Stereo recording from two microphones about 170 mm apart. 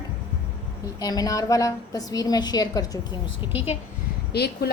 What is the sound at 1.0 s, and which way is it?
A woman's voice, 20° left (ahead or behind).